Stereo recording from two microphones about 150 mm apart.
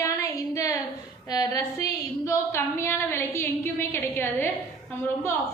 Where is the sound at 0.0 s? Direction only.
20° left (ahead or behind).